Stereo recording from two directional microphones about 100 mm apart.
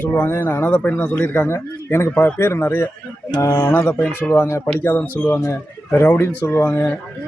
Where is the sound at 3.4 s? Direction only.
35° left (ahead or behind).